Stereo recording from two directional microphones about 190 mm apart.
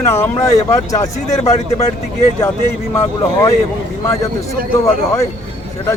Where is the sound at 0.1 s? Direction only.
15° left (ahead or behind).